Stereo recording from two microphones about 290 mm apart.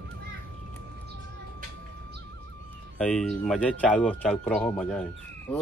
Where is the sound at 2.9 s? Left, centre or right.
Centre.